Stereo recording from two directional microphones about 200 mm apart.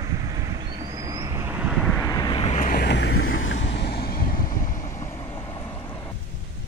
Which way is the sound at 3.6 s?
55° left (ahead or behind).